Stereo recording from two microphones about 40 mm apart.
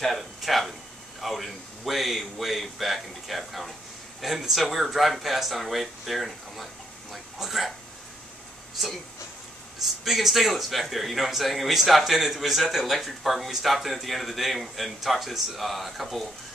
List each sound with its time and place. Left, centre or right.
0.0 s a man's voice: centre
9.8 s a man's voice: centre